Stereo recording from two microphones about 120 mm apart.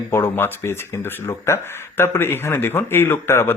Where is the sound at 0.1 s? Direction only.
20° left (ahead or behind).